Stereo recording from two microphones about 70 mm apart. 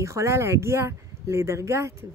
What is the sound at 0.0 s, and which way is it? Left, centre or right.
Speech, right.